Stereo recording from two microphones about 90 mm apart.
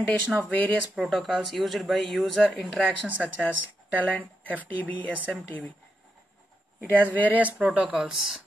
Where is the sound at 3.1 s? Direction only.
20° left (ahead or behind).